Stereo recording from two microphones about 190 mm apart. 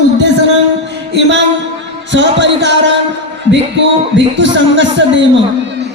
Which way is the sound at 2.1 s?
70° right (ahead or behind).